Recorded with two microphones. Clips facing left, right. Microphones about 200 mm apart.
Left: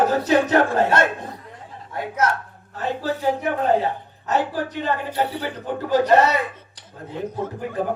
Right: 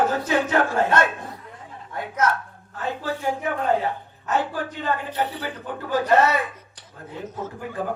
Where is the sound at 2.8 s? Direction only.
35° left (ahead or behind).